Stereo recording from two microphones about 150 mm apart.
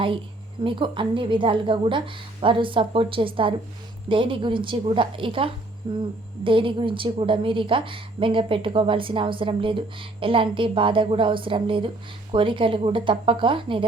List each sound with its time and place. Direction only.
0.6 s a woman's voice: 35° right (ahead or behind)